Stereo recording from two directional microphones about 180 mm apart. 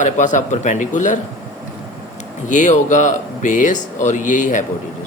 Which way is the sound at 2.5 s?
45° left (ahead or behind).